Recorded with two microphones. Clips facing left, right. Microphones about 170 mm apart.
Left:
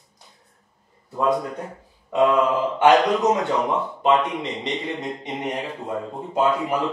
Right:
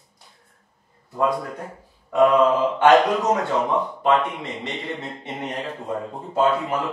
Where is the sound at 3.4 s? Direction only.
20° left (ahead or behind).